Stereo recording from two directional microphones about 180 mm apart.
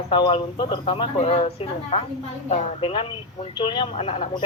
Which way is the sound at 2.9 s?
25° left (ahead or behind).